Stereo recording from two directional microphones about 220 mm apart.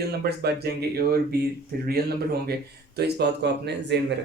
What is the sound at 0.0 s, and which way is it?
Speech, 45° right (ahead or behind).